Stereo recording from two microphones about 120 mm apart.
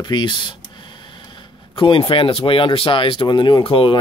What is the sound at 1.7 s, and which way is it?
Speech, 45° left (ahead or behind).